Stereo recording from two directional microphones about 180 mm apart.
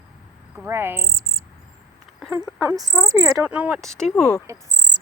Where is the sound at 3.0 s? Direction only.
5° right (ahead or behind).